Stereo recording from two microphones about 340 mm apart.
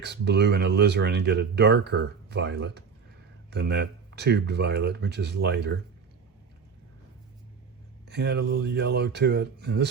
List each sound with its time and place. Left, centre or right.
0.0 s speech: right
8.0 s speech: right